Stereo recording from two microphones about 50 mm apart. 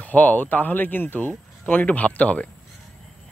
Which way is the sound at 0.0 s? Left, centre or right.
Left.